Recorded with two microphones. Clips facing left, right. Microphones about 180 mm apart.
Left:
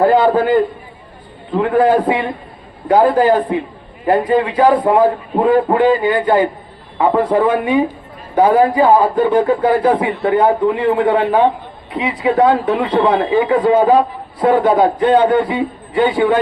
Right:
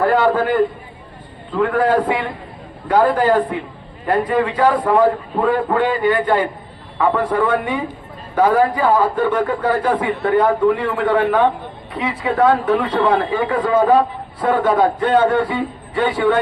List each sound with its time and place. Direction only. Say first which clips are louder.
0.0 s a man's voice: left 4 dB; 20° left (ahead or behind)